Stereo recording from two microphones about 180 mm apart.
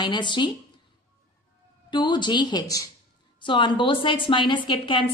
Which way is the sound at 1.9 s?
25° left (ahead or behind).